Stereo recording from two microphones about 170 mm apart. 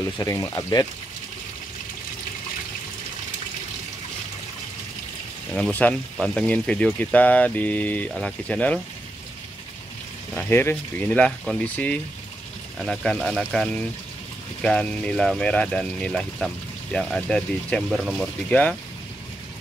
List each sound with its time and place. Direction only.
0.2 s speech: 20° left (ahead or behind)
5.5 s speech: 10° left (ahead or behind)
10.3 s speech: 10° left (ahead or behind)